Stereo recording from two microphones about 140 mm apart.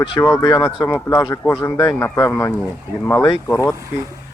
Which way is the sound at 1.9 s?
20° left (ahead or behind).